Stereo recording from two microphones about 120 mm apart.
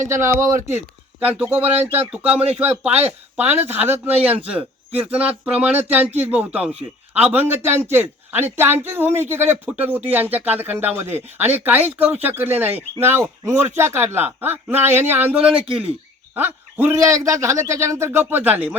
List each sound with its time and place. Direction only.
0.0 s a man's voice: 25° right (ahead or behind)
1.2 s a man's voice: 15° right (ahead or behind)